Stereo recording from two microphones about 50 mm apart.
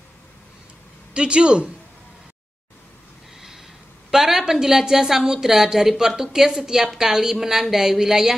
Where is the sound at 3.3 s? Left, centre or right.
Centre.